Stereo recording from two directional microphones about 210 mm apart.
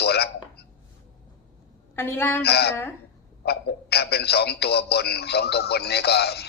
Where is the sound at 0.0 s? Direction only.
50° left (ahead or behind).